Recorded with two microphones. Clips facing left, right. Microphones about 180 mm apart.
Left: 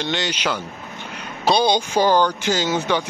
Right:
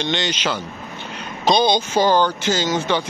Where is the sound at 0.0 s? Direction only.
10° left (ahead or behind).